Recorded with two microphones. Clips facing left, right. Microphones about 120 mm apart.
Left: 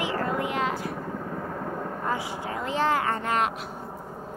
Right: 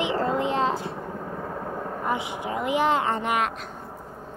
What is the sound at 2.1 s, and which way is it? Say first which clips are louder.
Speech: right 3 dB; 20° right (ahead or behind).